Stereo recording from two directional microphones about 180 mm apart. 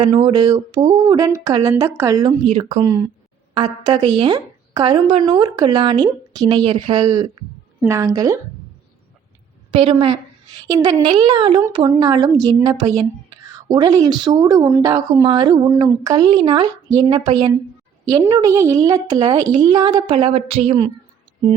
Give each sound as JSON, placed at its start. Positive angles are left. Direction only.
{"t": 0.0, "sound": "speech", "side_deg": -30}
{"t": 2.8, "sound": "a woman's voice", "side_deg": -20}
{"t": 9.7, "sound": "a woman's voice", "side_deg": -30}
{"t": 10.6, "sound": "speech", "side_deg": -20}
{"t": 18.1, "sound": "a woman's voice", "side_deg": -15}